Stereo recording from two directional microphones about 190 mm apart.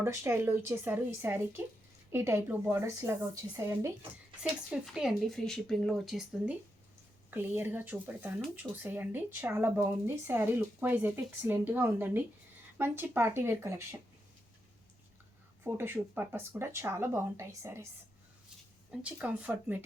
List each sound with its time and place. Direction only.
0.0 s speech: 15° right (ahead or behind)
4.7 s speech: 5° right (ahead or behind)
15.6 s speech: 10° right (ahead or behind)
18.9 s speech: 5° right (ahead or behind)